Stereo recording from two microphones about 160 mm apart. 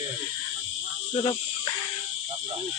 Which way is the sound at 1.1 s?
30° left (ahead or behind).